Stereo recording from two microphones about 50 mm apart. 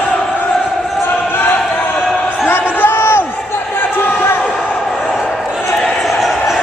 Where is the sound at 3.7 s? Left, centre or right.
Left.